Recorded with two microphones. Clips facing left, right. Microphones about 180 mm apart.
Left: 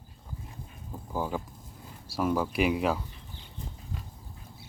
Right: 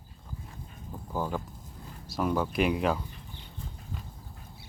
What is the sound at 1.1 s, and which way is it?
Speech, 10° left (ahead or behind).